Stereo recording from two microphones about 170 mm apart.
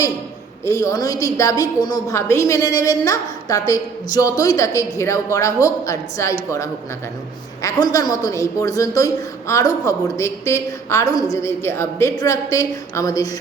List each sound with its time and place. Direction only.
0.6 s a woman's voice: 20° left (ahead or behind)
7.6 s a woman's voice: 20° left (ahead or behind)